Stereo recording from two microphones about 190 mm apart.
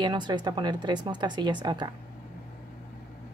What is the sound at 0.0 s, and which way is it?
Speech, 25° right (ahead or behind).